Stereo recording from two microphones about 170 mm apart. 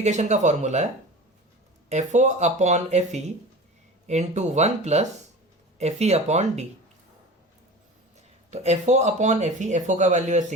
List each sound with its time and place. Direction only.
0.0 s speech: 45° right (ahead or behind)
1.9 s speech: 45° right (ahead or behind)
8.4 s speech: 40° right (ahead or behind)